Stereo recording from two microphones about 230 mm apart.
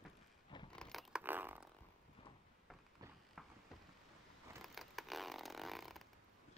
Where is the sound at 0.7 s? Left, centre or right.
Centre.